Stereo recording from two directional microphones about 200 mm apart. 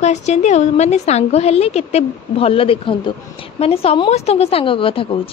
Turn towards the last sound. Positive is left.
turn(degrees=25)  # may be behind; listen again after turning